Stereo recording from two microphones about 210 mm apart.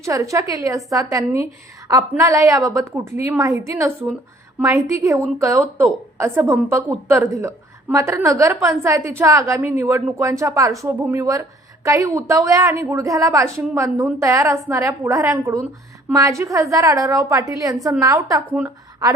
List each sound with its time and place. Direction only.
0.0 s a woman's voice: 15° right (ahead or behind)